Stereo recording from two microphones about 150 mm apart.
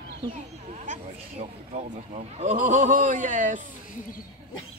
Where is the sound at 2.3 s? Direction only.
55° right (ahead or behind).